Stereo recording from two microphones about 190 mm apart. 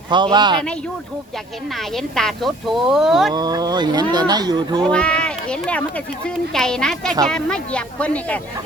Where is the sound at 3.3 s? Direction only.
20° right (ahead or behind).